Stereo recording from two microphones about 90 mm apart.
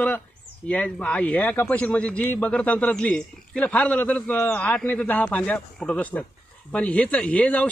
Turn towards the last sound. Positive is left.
turn(degrees=15)  # may be behind; listen again after turning